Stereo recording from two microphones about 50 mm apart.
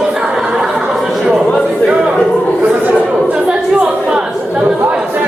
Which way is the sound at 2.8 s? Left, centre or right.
Right.